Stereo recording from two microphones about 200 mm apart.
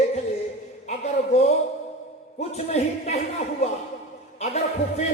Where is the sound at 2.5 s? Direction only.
35° left (ahead or behind).